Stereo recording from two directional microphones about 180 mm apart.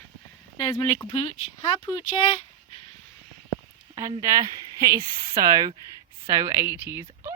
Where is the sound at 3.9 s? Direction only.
20° right (ahead or behind).